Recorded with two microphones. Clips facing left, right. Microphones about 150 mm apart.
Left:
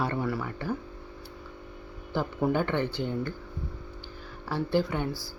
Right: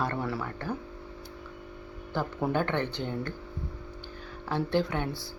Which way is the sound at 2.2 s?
10° left (ahead or behind).